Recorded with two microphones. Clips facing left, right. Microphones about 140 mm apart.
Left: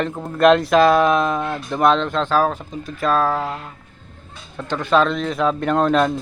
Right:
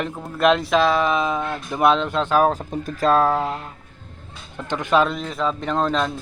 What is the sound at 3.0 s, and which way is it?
Speech, 25° right (ahead or behind).